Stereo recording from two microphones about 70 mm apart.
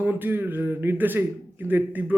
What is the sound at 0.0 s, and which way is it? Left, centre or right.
Speech, right.